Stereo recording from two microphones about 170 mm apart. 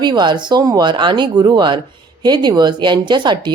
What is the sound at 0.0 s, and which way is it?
A woman's voice, 25° right (ahead or behind).